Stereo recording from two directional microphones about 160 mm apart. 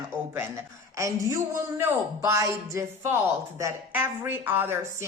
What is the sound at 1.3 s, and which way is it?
Speech, 15° right (ahead or behind).